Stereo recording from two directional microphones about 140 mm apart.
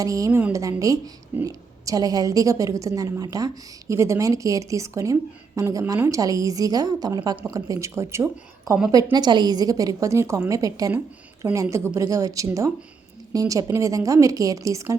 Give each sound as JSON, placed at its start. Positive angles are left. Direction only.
{"t": 0.0, "sound": "a woman's voice", "side_deg": -25}
{"t": 9.1, "sound": "a woman's voice", "side_deg": -30}